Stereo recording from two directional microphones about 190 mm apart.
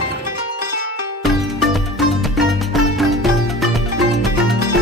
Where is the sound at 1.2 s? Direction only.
Centre (ahead or behind).